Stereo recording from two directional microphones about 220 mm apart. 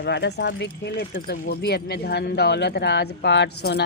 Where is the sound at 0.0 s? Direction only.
50° left (ahead or behind).